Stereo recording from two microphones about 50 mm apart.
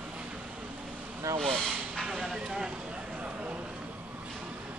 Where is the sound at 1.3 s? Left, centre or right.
Right.